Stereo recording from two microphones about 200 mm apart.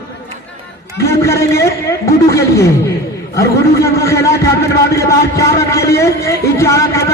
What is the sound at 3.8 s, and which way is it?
Speech, 50° left (ahead or behind).